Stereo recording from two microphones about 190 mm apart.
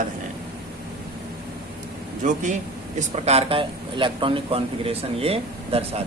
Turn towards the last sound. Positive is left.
turn(degrees=-30)  # may be behind; listen again after turning